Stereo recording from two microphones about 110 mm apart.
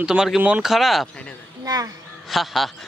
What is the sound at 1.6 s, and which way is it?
Speech, 35° right (ahead or behind).